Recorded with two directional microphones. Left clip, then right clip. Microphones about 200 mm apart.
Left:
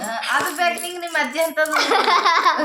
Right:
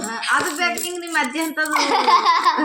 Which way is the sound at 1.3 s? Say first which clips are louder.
Left 2 dB; 20° left (ahead or behind).